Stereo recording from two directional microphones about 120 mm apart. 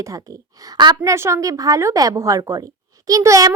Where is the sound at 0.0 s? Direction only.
30° right (ahead or behind).